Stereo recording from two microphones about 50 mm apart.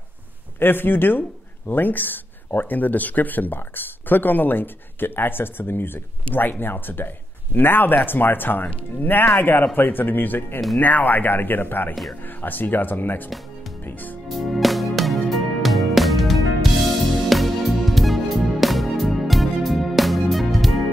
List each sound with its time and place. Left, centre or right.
0.6 s speech: left
14.3 s music: centre